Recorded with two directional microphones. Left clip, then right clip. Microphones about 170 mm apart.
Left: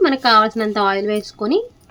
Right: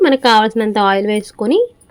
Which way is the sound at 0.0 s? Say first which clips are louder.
Right 3 dB; 25° right (ahead or behind).